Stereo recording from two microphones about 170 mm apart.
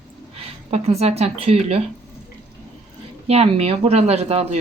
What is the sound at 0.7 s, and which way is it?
Speech, 40° right (ahead or behind).